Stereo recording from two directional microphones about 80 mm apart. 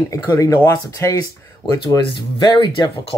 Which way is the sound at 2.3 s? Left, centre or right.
Left.